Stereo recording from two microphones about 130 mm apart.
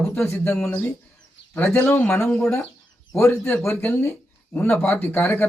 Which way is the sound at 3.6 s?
15° left (ahead or behind).